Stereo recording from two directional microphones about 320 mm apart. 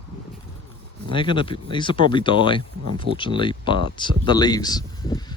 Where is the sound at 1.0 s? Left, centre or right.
Centre.